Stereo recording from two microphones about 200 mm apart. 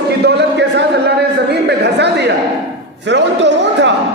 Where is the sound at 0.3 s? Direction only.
55° right (ahead or behind).